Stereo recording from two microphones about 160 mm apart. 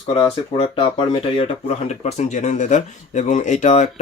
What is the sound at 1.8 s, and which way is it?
Speech, 45° left (ahead or behind).